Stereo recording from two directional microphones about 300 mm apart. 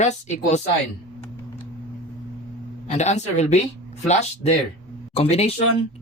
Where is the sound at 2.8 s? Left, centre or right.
Left.